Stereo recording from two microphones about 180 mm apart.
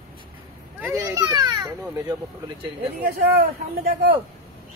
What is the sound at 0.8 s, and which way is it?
Speech, 15° right (ahead or behind).